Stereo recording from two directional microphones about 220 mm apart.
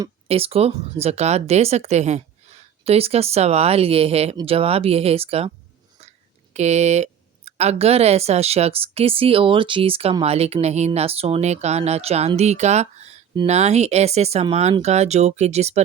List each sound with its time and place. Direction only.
0.3 s speech: 25° right (ahead or behind)